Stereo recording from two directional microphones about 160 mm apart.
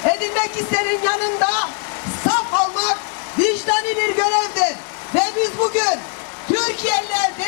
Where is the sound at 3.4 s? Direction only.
10° left (ahead or behind).